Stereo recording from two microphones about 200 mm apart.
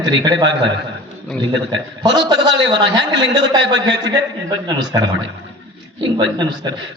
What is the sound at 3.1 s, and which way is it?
A man's voice, 65° right (ahead or behind).